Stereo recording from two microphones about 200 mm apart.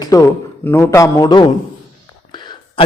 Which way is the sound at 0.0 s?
15° left (ahead or behind).